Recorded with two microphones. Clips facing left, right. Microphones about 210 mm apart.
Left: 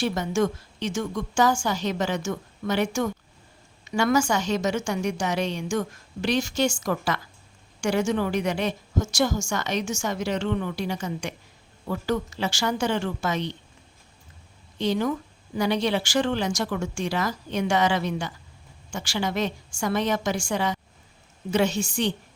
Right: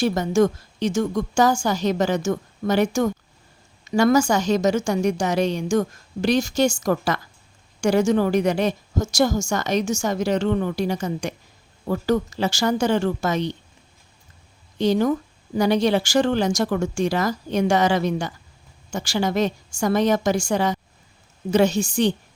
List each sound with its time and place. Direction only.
0.0 s a woman's voice: 40° right (ahead or behind)
14.8 s a woman's voice: 40° right (ahead or behind)